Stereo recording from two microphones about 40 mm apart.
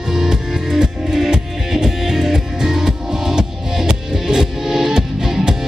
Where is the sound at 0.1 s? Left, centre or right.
Centre.